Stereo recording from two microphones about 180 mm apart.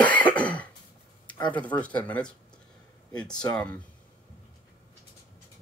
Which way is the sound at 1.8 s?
10° left (ahead or behind).